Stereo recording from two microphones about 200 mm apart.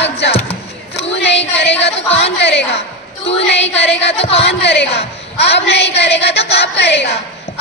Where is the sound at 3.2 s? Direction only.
60° left (ahead or behind).